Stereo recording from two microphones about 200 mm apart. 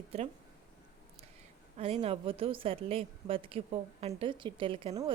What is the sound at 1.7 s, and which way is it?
Speech, 35° right (ahead or behind).